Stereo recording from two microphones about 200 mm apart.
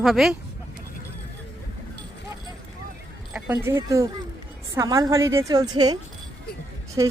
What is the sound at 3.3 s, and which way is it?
Speech, 10° right (ahead or behind).